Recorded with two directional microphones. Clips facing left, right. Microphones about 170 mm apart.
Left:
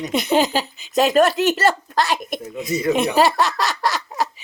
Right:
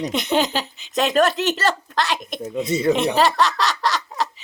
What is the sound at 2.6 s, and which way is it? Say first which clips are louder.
Speech: right 1 dB; 30° right (ahead or behind).